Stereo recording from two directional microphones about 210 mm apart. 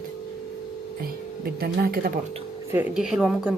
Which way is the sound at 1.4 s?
45° right (ahead or behind).